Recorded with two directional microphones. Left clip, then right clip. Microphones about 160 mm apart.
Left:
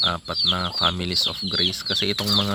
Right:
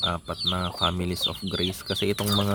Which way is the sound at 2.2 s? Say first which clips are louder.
Left 5 dB; 5° right (ahead or behind).